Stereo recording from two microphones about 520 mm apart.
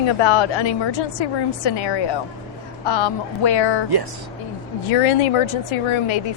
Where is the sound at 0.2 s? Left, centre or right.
Left.